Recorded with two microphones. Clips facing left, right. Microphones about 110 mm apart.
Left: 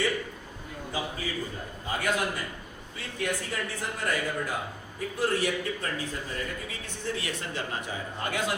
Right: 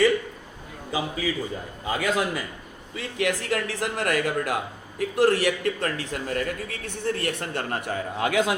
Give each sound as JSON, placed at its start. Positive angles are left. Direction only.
{"t": 0.9, "sound": "a man's voice", "side_deg": -90}